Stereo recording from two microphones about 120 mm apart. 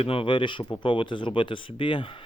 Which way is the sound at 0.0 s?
50° left (ahead or behind).